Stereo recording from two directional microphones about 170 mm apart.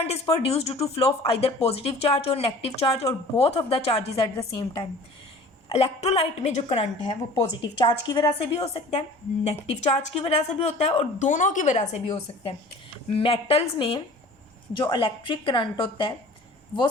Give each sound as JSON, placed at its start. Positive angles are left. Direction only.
{"t": 0.0, "sound": "a woman's voice", "side_deg": 35}
{"t": 5.7, "sound": "a woman's voice", "side_deg": 40}